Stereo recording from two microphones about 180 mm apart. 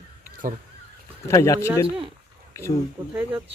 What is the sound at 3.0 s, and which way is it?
Speech, 25° right (ahead or behind).